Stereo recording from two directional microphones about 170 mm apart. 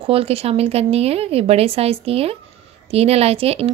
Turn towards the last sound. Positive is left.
turn(degrees=-35)  # may be behind; listen again after turning